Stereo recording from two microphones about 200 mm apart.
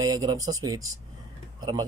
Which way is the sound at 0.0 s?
20° right (ahead or behind).